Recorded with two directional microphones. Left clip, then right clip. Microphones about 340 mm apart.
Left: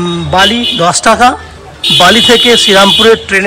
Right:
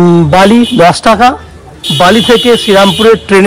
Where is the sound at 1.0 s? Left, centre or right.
Centre.